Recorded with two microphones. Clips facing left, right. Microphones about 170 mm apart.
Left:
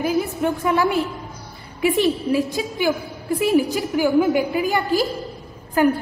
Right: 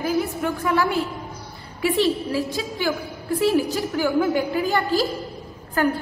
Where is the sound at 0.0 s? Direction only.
20° left (ahead or behind).